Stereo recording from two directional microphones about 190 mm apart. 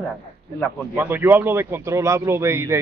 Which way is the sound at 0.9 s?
10° right (ahead or behind).